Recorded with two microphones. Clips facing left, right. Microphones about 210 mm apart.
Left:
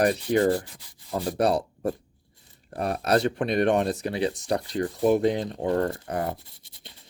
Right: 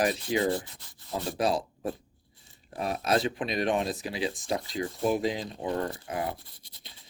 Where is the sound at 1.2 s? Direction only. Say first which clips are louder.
Left 4 dB; 65° left (ahead or behind); by 6.4 s 45° left (ahead or behind).